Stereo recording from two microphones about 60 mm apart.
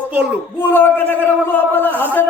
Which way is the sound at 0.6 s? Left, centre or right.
Left.